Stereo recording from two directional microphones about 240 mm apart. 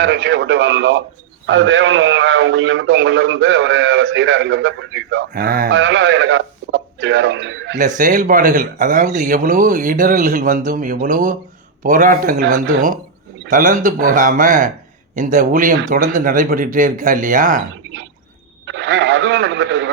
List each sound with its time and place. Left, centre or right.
0.0 s a man's voice: right
7.8 s a man's voice: right
18.6 s radio: right